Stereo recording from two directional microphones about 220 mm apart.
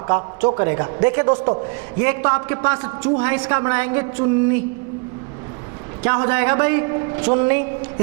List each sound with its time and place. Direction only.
0.6 s a man's voice: 15° right (ahead or behind)
3.0 s a man's voice: 10° right (ahead or behind)
6.0 s a man's voice: 15° right (ahead or behind)